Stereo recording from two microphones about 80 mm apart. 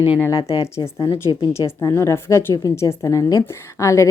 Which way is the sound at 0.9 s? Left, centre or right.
Left.